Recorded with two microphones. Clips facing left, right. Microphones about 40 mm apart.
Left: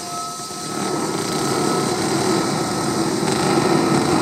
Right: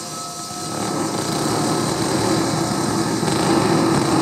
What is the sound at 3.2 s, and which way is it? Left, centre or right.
Light engine, centre.